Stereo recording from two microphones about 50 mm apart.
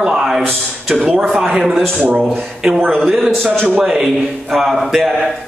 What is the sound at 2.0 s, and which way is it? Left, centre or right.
Speech, right.